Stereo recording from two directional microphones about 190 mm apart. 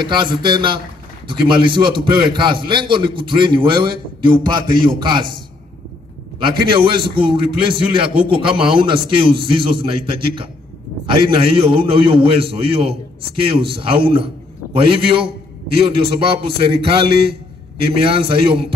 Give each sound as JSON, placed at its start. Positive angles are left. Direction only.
{"t": 0.0, "sound": "a man's voice", "side_deg": -25}
{"t": 6.4, "sound": "a man's voice", "side_deg": -25}